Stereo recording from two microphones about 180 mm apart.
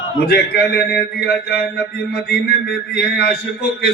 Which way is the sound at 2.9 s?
60° left (ahead or behind).